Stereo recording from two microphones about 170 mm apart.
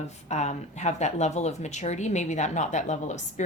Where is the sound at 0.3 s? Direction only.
40° left (ahead or behind).